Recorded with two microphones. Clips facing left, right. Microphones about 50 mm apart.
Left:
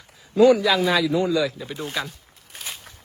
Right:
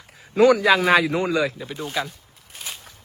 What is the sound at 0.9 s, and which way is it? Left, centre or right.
Speech, right.